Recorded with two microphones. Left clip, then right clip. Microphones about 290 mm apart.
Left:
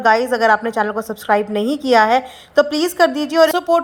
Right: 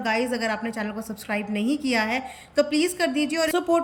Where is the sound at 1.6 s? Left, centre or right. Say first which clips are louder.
Left 10 dB; centre.